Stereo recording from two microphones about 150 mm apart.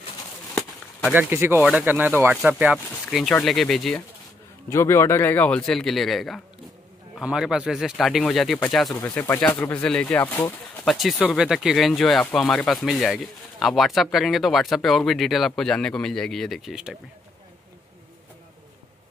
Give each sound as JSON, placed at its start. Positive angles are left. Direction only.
{"t": 1.1, "sound": "speech", "side_deg": -15}
{"t": 4.6, "sound": "speech", "side_deg": 15}
{"t": 9.0, "sound": "speech", "side_deg": 15}
{"t": 10.9, "sound": "speech", "side_deg": 0}